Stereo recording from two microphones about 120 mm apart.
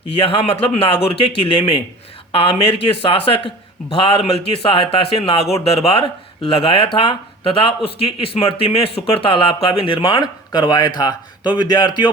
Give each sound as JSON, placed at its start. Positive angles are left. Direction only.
{"t": 0.1, "sound": "speech", "side_deg": 55}